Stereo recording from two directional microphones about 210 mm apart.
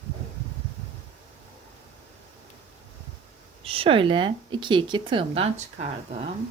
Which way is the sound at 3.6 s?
25° right (ahead or behind).